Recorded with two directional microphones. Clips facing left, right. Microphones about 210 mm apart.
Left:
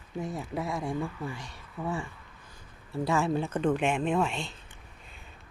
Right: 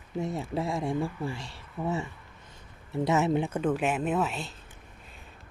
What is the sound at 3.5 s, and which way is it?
Speech, 5° right (ahead or behind).